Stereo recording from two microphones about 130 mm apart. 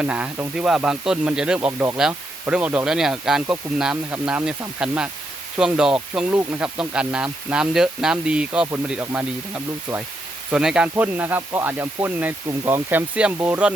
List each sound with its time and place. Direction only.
0.0 s speech: 10° right (ahead or behind)
10.5 s speech: 5° right (ahead or behind); by 12.8 s 25° right (ahead or behind)
12.9 s speech: 10° right (ahead or behind)